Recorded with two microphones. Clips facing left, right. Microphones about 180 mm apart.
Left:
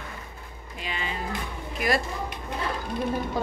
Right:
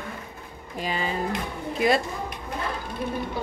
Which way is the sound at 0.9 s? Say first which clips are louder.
Right 5 dB; 40° right (ahead or behind).